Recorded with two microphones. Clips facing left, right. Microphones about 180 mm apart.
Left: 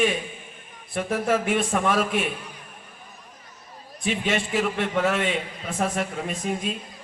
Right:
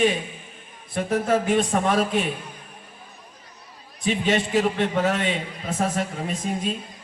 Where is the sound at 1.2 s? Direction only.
35° right (ahead or behind).